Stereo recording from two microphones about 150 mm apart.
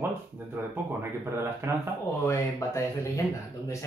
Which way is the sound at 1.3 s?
15° right (ahead or behind).